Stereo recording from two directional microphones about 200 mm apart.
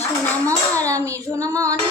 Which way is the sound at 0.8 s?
15° right (ahead or behind).